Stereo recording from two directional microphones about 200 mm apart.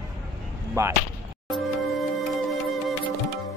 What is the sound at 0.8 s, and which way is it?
Speech, 15° right (ahead or behind).